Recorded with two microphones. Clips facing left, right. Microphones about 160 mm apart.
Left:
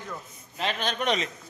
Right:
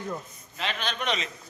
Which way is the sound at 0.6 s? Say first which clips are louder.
Left 3 dB; 45° left (ahead or behind).